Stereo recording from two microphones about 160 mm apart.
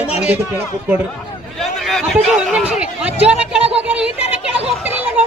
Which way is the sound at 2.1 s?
5° right (ahead or behind).